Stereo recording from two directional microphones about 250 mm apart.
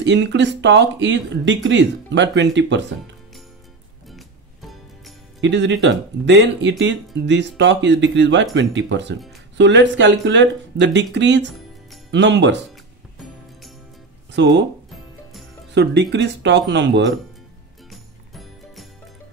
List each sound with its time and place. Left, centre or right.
0.0 s speech: right
4.1 s music: centre
5.4 s speech: right
14.3 s speech: right
15.7 s speech: right
17.9 s music: centre